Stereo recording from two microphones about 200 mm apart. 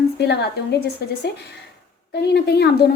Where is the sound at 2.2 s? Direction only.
55° left (ahead or behind).